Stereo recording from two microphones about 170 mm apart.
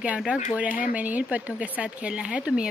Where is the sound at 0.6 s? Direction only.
50° left (ahead or behind).